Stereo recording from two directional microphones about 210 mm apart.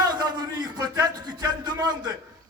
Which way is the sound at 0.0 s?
20° right (ahead or behind).